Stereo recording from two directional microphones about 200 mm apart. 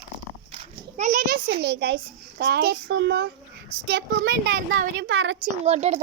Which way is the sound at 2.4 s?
55° right (ahead or behind).